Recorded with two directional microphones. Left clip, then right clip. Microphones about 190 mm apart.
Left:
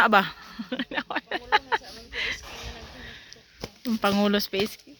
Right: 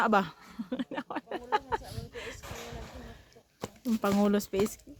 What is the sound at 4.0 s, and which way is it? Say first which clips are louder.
Speech: left 5 dB; centre (ahead or behind).